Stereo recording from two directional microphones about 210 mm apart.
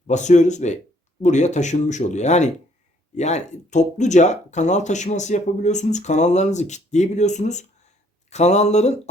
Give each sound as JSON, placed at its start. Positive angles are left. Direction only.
{"t": 0.1, "sound": "speech", "side_deg": 35}